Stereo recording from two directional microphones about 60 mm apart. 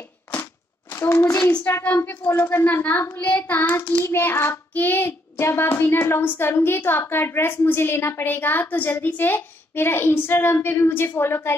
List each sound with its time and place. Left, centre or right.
0.3 s a sound: left
1.7 s a woman's voice: left
5.4 s a woman's voice: left